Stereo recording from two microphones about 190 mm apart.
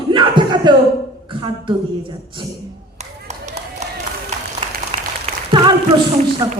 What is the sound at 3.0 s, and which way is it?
Clapping, 35° right (ahead or behind).